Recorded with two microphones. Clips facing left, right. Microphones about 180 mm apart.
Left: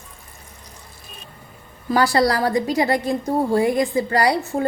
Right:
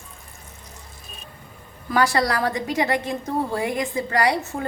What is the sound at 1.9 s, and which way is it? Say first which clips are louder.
A woman's voice: left 3 dB; 35° left (ahead or behind).